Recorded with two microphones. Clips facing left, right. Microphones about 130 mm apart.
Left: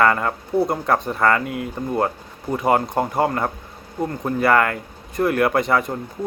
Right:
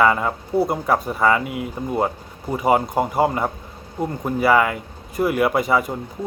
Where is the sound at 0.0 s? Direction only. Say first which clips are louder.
Even; 5° right (ahead or behind).